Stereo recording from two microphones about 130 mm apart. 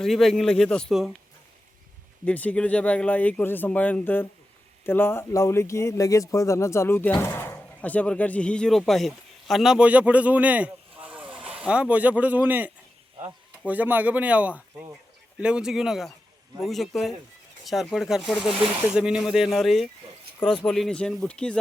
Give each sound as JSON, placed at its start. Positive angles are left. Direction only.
{"t": 0.0, "sound": "a man's voice", "side_deg": 0}
{"t": 2.2, "sound": "a man's voice", "side_deg": 10}